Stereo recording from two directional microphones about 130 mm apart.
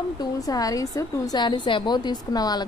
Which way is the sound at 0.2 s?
30° left (ahead or behind).